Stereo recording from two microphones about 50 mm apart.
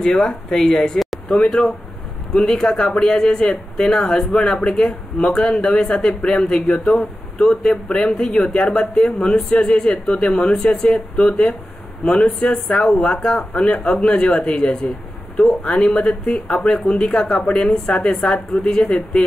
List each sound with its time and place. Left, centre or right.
0.0 s speech: centre
0.9 s speech: centre
7.4 s speech: centre
15.8 s speech: centre